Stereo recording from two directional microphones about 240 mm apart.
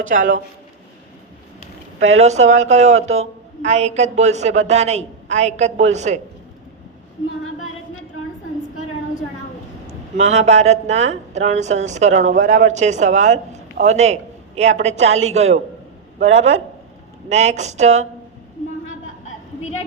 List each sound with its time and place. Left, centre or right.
2.0 s a woman's voice: right
9.8 s a woman's voice: right